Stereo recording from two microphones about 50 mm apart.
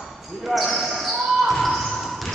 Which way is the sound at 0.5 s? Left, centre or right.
Centre.